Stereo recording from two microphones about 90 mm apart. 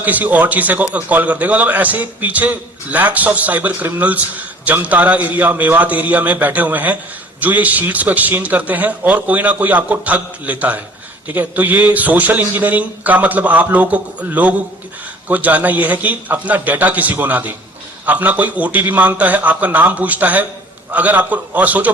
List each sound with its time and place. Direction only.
0.0 s a man's voice: 20° right (ahead or behind)